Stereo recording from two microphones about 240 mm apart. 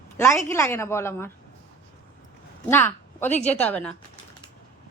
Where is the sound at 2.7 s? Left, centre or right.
Centre.